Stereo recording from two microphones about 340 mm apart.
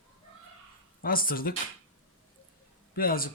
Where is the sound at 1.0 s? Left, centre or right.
Left.